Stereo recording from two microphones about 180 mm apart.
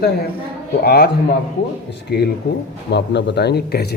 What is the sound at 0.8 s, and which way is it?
Speech, 55° left (ahead or behind).